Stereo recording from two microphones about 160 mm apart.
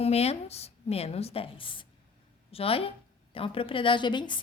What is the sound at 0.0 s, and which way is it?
A woman's voice, 40° left (ahead or behind).